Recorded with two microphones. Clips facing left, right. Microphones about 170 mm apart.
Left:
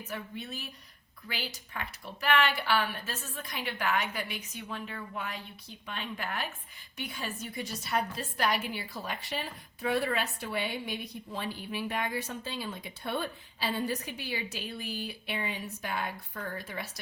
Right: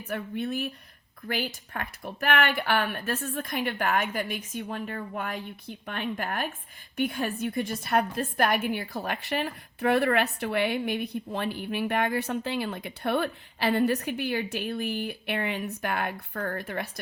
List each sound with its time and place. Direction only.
0.1 s a woman's voice: 55° right (ahead or behind)